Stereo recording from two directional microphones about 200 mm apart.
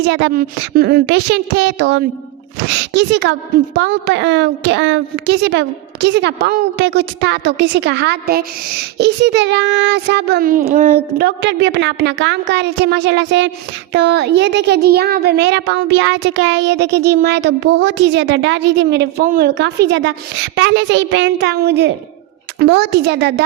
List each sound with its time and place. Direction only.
0.1 s a child's voice: 60° right (ahead or behind)